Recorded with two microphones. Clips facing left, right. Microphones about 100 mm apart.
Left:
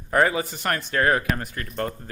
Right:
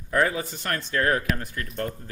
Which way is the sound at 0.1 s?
80° left.